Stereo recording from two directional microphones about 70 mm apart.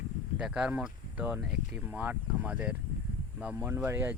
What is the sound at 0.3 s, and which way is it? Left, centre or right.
Speech, centre.